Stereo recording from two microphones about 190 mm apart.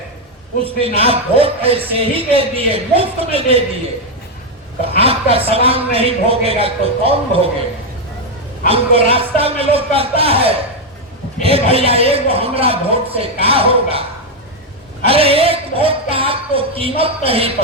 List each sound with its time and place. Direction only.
0.6 s a man's voice: 30° right (ahead or behind)
4.9 s a man's voice: 30° right (ahead or behind)
8.6 s a man's voice: 30° right (ahead or behind)
15.0 s speech: 30° right (ahead or behind)